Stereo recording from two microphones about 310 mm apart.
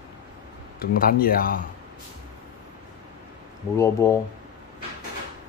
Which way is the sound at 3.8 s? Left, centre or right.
Centre.